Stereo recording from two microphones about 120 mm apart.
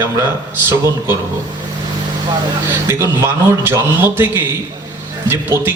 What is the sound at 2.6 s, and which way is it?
A man's voice, 20° right (ahead or behind).